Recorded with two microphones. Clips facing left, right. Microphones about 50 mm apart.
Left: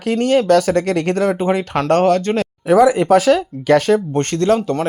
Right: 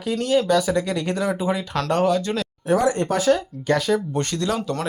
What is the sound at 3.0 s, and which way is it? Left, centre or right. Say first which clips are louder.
Speech: left 7 dB; left.